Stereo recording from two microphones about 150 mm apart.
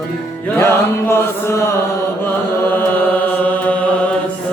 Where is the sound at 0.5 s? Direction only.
15° left (ahead or behind).